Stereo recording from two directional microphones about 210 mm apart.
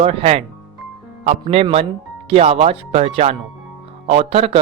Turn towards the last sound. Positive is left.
turn(degrees=-30)  # may be behind; listen again after turning